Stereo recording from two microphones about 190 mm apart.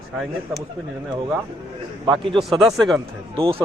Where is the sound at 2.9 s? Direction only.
25° right (ahead or behind).